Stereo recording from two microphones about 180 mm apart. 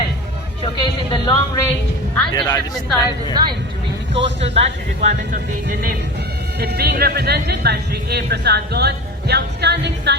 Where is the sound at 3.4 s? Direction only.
20° right (ahead or behind).